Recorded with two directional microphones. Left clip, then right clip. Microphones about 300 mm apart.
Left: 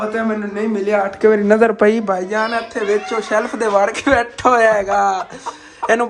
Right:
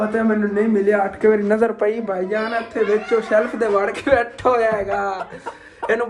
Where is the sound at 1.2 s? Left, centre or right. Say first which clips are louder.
Left 5 dB; left.